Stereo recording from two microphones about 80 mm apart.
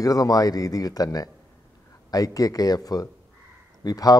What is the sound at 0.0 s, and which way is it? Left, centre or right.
A man's voice, left.